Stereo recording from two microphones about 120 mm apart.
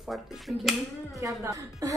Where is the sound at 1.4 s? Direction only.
25° right (ahead or behind).